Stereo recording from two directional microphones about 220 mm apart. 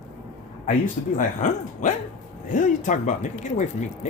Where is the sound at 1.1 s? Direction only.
35° left (ahead or behind).